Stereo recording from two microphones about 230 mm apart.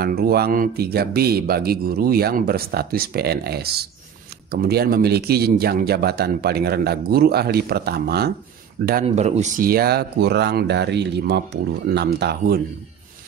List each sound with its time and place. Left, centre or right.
0.0 s speech: right
9.0 s speech: right